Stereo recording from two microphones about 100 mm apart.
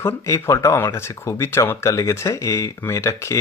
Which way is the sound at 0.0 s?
30° left (ahead or behind).